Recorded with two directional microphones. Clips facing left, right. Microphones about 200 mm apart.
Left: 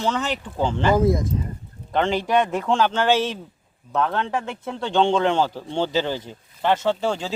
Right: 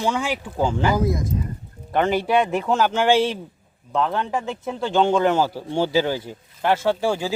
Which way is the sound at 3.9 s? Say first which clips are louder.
Even; centre (ahead or behind).